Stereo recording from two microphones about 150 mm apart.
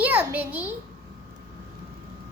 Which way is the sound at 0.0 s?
10° right (ahead or behind).